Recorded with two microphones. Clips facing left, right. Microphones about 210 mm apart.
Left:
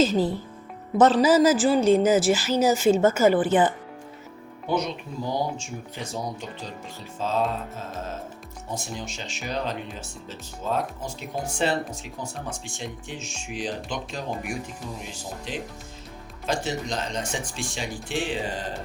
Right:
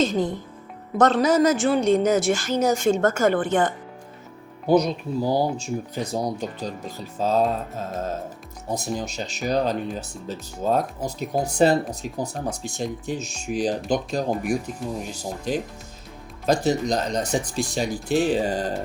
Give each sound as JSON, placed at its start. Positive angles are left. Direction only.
{"t": 0.0, "sound": "a woman's voice", "side_deg": 5}
{"t": 4.6, "sound": "speech", "side_deg": -40}
{"t": 8.7, "sound": "speech", "side_deg": -40}